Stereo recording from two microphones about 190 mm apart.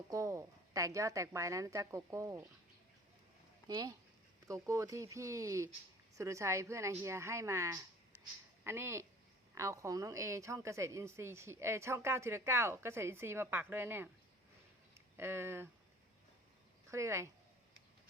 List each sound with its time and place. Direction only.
0.1 s a woman's voice: 15° right (ahead or behind)
3.7 s a woman's voice: 20° right (ahead or behind)
8.1 s a sound: 10° left (ahead or behind)
8.6 s a woman's voice: 15° right (ahead or behind)
15.2 s a woman's voice: 10° right (ahead or behind)
16.9 s a woman's voice: 15° right (ahead or behind)